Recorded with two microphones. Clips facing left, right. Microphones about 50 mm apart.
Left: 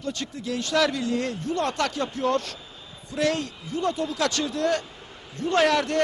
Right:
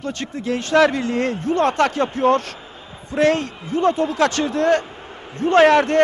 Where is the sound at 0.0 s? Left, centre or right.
Right.